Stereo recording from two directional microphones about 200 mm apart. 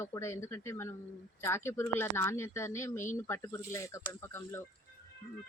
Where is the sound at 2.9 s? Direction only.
40° left (ahead or behind).